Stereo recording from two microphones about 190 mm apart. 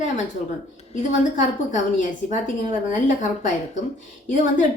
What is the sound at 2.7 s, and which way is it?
A woman's voice, 40° left (ahead or behind).